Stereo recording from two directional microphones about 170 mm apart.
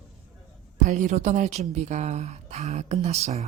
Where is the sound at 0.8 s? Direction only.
45° right (ahead or behind).